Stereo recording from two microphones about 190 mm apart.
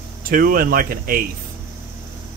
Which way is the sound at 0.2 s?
50° right (ahead or behind).